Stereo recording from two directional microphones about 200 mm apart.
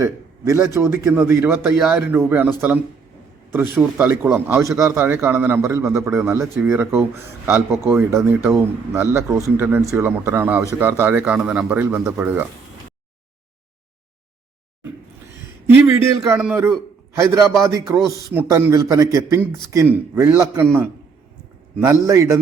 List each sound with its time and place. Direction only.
0.0 s a sound: 15° right (ahead or behind)
0.7 s a man's voice: 15° right (ahead or behind)
16.3 s a man's voice: 10° right (ahead or behind)
21.8 s a man's voice: 15° right (ahead or behind)